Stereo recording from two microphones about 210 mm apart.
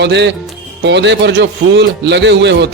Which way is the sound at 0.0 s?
55° right (ahead or behind).